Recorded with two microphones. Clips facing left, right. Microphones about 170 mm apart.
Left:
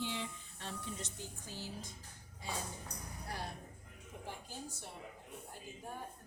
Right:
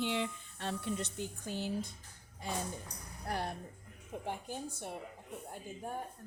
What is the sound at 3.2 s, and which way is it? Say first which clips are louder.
Speech: right 8 dB; 60° right (ahead or behind).